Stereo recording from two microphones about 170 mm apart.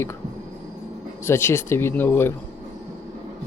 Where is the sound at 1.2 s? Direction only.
15° left (ahead or behind).